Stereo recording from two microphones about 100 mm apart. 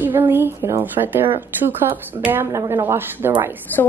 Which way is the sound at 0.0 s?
20° right (ahead or behind).